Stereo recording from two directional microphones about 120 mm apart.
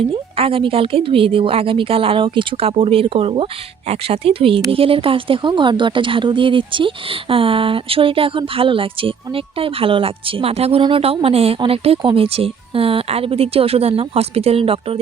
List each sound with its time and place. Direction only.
0.1 s speech: 50° right (ahead or behind)